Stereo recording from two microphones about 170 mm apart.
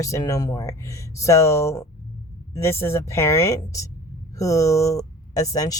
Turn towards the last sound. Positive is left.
turn(degrees=20)  # may be behind; listen again after turning